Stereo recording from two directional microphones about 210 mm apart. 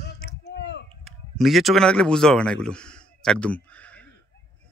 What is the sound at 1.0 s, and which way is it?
Speech, centre (ahead or behind).